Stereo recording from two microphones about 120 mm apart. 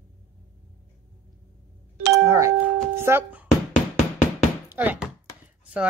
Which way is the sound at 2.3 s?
25° right (ahead or behind).